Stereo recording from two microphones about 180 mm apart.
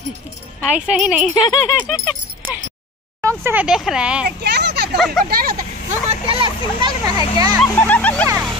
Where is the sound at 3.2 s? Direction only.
15° right (ahead or behind).